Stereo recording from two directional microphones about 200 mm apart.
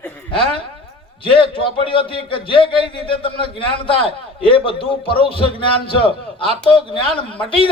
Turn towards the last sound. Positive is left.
turn(degrees=25)  # may be behind; listen again after turning